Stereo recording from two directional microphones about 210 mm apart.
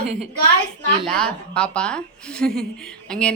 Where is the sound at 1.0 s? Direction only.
5° left (ahead or behind).